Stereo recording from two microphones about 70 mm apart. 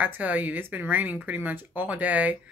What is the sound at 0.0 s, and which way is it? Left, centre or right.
Speech, right.